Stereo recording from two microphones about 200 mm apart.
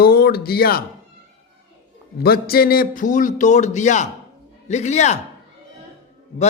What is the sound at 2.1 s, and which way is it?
Speech, 50° left (ahead or behind).